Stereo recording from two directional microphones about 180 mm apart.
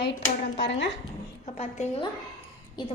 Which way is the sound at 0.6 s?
75° left (ahead or behind).